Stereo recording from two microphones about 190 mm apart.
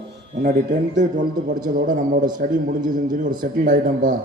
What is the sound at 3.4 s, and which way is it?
Speech, 45° right (ahead or behind).